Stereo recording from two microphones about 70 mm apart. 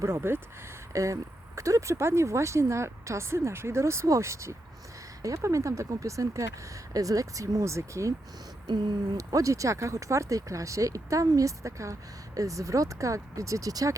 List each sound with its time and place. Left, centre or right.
0.0 s speech: right
0.9 s speech: right
9.1 s speech: right